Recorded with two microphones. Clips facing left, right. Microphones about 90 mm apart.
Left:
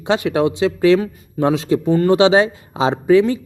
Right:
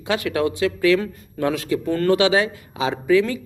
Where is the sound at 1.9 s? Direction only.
15° left (ahead or behind).